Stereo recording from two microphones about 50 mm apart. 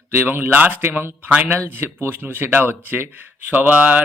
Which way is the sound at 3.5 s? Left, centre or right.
Right.